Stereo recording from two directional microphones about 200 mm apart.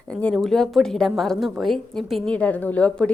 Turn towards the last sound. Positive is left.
turn(degrees=5)  # may be behind; listen again after turning